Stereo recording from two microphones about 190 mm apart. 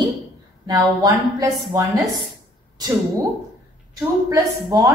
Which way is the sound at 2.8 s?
20° right (ahead or behind).